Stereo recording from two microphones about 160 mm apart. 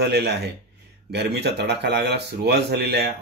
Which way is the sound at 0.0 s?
90° right.